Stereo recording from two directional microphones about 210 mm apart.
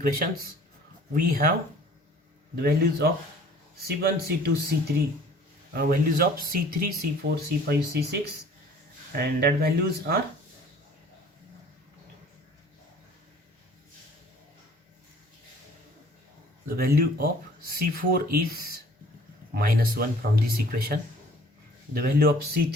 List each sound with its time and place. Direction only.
0.2 s speech: 40° right (ahead or behind)
2.6 s speech: 50° right (ahead or behind)
16.6 s speech: 45° right (ahead or behind)